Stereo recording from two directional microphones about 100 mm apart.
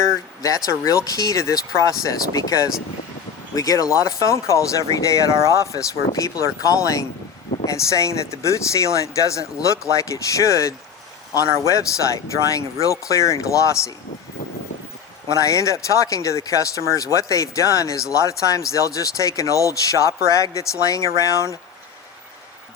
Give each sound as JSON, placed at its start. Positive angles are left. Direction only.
{"t": 0.4, "sound": "speech", "side_deg": 35}
{"t": 15.3, "sound": "speech", "side_deg": 30}